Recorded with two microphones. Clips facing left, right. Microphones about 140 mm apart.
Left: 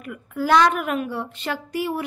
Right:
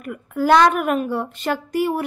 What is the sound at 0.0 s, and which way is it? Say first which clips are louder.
A woman's voice: right 4 dB; 45° right (ahead or behind).